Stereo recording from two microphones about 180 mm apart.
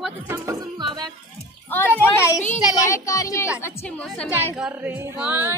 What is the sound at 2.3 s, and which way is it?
Speech, 40° left (ahead or behind).